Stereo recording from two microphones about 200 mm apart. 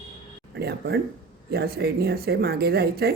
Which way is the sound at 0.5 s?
55° right (ahead or behind).